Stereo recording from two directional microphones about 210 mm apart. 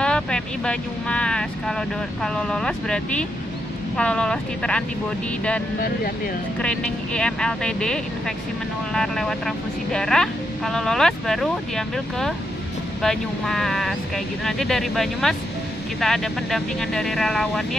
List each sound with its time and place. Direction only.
0.0 s speech: 5° left (ahead or behind)
5.8 s speech: 40° left (ahead or behind)
6.6 s speech: 5° left (ahead or behind)